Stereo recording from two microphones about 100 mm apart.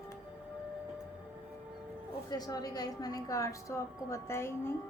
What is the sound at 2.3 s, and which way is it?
A woman's voice, 40° left (ahead or behind).